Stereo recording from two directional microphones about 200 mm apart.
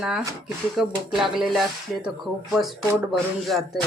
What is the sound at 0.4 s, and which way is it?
Speech, centre (ahead or behind).